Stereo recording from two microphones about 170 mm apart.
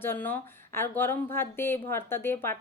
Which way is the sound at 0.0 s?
10° left (ahead or behind).